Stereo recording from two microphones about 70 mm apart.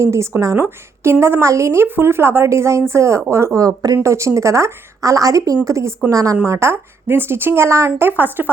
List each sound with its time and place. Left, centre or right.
0.0 s a woman's voice: right
0.6 s a woman's voice: right
8.1 s speech: right